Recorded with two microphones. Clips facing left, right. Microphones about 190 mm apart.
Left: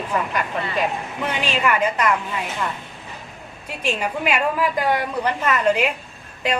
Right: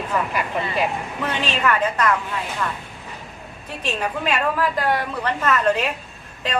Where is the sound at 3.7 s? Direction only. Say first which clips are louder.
Left 1 dB; 10° left (ahead or behind).